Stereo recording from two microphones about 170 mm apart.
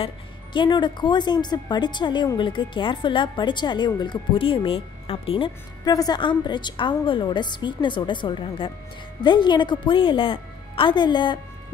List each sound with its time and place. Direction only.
0.0 s speech: 25° left (ahead or behind)